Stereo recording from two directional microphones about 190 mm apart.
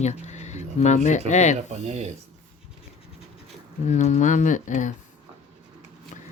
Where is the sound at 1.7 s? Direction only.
35° right (ahead or behind).